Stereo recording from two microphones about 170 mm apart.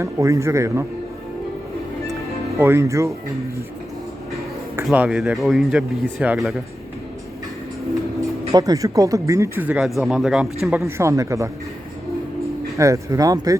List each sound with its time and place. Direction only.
0.0 s speech: 20° right (ahead or behind)
2.6 s speech: 15° right (ahead or behind)
4.9 s speech: 5° right (ahead or behind)
8.5 s speech: 20° right (ahead or behind); by 10.8 s 5° right (ahead or behind)
10.8 s speech: 15° right (ahead or behind)
12.7 s speech: 20° right (ahead or behind)